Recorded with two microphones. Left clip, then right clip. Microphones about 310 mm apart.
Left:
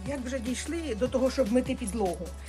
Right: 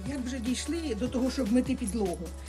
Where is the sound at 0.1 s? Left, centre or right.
Centre.